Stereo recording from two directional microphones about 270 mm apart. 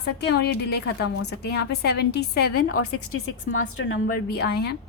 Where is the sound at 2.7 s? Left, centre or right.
Left.